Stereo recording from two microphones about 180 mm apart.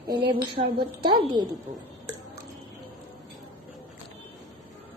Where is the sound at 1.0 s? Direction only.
25° right (ahead or behind).